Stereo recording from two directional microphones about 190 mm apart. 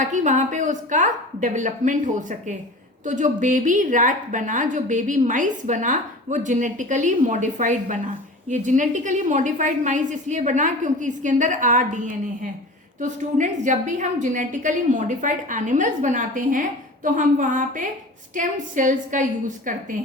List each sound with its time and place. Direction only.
0.0 s a woman's voice: 40° right (ahead or behind)